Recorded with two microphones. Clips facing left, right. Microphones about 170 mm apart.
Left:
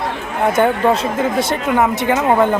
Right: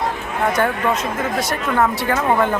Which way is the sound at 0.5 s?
25° left (ahead or behind).